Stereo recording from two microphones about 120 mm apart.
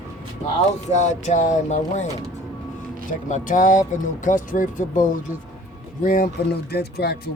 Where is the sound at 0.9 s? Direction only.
80° left.